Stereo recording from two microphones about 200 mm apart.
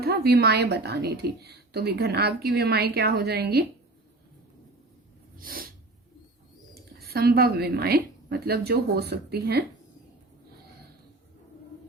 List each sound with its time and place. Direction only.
0.0 s a woman's voice: 50° right (ahead or behind)
5.4 s snort: 45° right (ahead or behind)
7.0 s a woman's voice: 50° right (ahead or behind)